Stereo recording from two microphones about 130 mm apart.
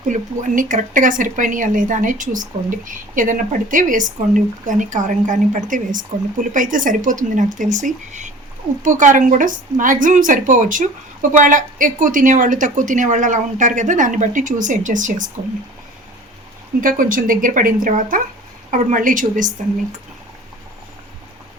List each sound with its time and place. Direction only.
0.1 s speech: 90° right
16.8 s speech: 90° right